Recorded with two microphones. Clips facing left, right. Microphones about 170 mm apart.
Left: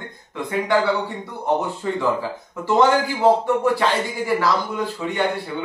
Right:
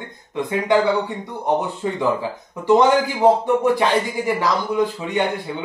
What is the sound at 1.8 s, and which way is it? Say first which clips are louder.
Speech: even; 20° right (ahead or behind).